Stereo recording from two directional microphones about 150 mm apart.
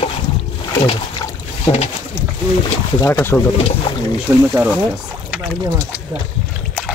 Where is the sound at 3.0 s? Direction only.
15° left (ahead or behind).